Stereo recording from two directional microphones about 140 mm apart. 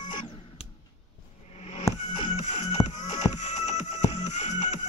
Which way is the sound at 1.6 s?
50° left (ahead or behind).